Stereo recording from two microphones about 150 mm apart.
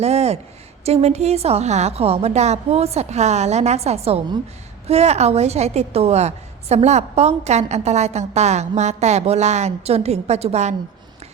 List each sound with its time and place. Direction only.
0.0 s a woman's voice: 45° right (ahead or behind)